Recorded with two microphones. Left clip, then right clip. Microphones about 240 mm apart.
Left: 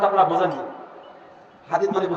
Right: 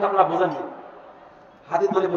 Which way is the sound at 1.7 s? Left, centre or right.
Left.